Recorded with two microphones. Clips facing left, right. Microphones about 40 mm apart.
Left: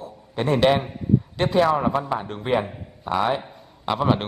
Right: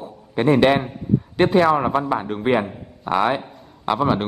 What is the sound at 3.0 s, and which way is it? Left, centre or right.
Speech, right.